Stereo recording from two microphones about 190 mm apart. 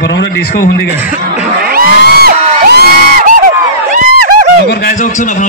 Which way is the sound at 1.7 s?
55° right (ahead or behind).